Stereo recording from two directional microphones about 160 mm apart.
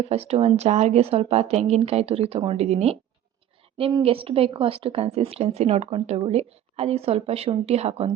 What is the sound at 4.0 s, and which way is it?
Speech, 35° right (ahead or behind).